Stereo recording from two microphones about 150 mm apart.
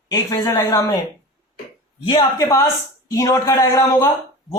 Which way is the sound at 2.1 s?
25° left (ahead or behind).